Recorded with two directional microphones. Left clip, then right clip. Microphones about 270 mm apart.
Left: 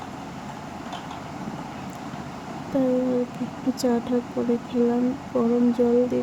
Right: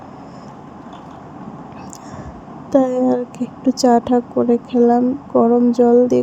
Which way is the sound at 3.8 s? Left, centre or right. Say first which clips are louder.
Right 11 dB; centre.